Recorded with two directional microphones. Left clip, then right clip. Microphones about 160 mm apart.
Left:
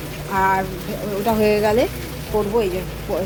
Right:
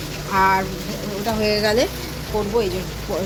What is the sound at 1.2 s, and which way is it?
Speech, 25° left (ahead or behind).